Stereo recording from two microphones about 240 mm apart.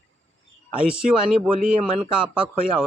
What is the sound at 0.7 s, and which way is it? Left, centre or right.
Speech, centre.